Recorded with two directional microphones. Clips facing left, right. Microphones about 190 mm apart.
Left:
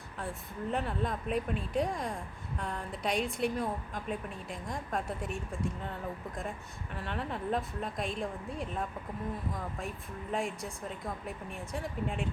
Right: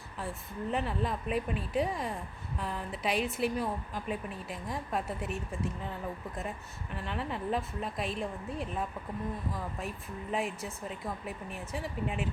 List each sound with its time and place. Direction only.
0.7 s a woman's voice: centre (ahead or behind)
6.9 s a woman's voice: centre (ahead or behind)
10.3 s a woman's voice: 5° right (ahead or behind)